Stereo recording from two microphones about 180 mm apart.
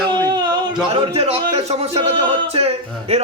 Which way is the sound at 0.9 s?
35° right (ahead or behind).